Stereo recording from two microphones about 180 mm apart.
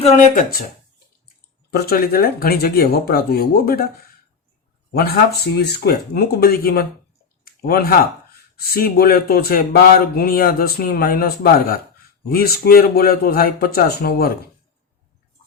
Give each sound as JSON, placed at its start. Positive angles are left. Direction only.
{"t": 0.0, "sound": "speech", "side_deg": 40}
{"t": 1.7, "sound": "speech", "side_deg": 60}
{"t": 4.9, "sound": "speech", "side_deg": 65}
{"t": 7.4, "sound": "a sound", "side_deg": 55}
{"t": 8.5, "sound": "speech", "side_deg": 60}